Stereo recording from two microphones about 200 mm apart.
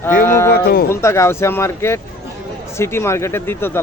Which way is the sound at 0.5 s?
50° left (ahead or behind).